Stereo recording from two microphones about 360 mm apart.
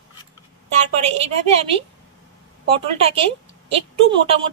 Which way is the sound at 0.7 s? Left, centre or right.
Centre.